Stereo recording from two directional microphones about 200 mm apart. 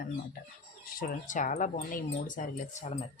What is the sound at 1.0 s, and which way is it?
Speech, 40° left (ahead or behind).